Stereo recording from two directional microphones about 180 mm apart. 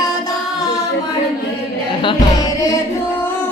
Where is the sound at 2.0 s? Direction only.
25° left (ahead or behind).